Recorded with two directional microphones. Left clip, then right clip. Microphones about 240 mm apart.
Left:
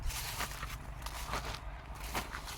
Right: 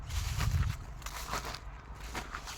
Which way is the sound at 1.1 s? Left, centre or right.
Centre.